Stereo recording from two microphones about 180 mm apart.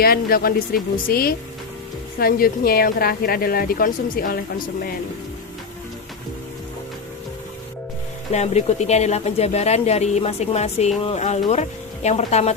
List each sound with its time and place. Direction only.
0.0 s a woman's voice: 55° left (ahead or behind)
8.3 s speech: 40° left (ahead or behind)